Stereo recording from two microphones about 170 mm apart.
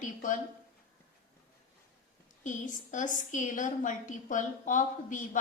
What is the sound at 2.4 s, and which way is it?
A woman's voice, 50° left (ahead or behind).